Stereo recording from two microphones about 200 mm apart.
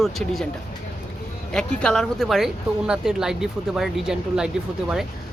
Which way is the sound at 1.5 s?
5° left (ahead or behind).